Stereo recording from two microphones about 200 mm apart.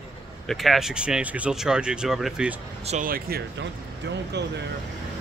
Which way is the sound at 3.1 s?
50° right (ahead or behind).